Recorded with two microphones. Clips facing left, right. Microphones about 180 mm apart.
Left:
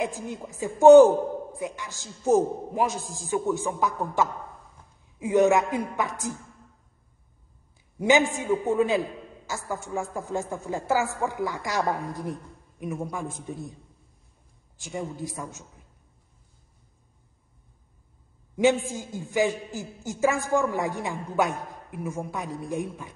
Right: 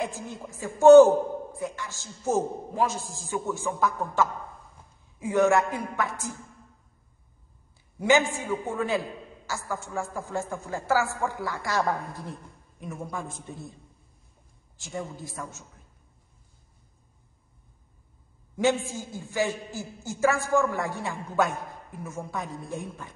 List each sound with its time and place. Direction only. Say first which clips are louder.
0.0 s a man's voice: left 3 dB; 15° left (ahead or behind)
8.0 s a man's voice: left 1 dB; 20° left (ahead or behind)
14.8 s a man's voice: left 3 dB; 10° left (ahead or behind)
18.9 s a man's voice: left 3 dB; 15° left (ahead or behind)